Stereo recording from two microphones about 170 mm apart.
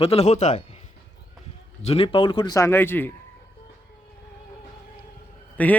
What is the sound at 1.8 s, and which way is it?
A man's voice, 35° left (ahead or behind).